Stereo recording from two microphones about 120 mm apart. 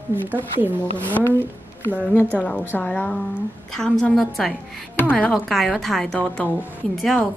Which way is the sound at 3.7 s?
5° left (ahead or behind).